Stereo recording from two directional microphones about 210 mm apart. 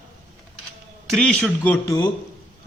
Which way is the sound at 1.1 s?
5° left (ahead or behind).